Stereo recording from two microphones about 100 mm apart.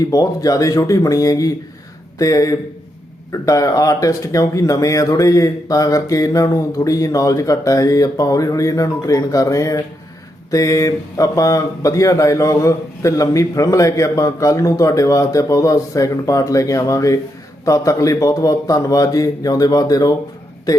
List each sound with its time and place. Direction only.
0.1 s a man's voice: 35° left (ahead or behind)